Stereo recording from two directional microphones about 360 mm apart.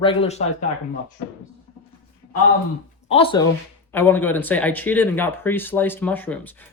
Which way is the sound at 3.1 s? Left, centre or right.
Centre.